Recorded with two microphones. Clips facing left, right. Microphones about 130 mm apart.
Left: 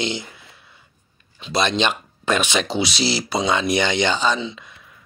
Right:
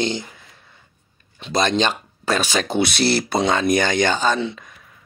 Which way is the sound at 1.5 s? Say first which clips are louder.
Right 1 dB; 45° right (ahead or behind).